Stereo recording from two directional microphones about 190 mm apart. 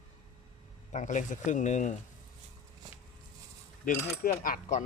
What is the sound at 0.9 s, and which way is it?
Speech, 40° left (ahead or behind).